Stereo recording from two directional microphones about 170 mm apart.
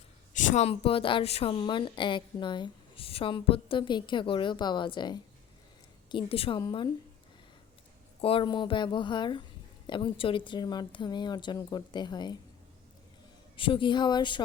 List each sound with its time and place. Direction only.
0.3 s a woman's voice: 45° left (ahead or behind); by 6.9 s 25° left (ahead or behind)
8.2 s a woman's voice: 30° left (ahead or behind)
13.6 s a woman's voice: 30° left (ahead or behind)